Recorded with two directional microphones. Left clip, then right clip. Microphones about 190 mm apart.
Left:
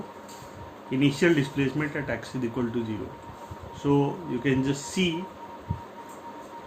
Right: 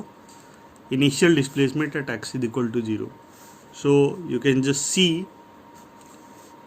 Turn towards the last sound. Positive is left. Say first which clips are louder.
# right 6 dB
turn(degrees=-55)  # may be behind; listen again after turning